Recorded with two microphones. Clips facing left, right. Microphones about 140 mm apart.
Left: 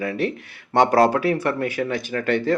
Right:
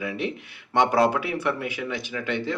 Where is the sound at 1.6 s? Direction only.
50° left (ahead or behind).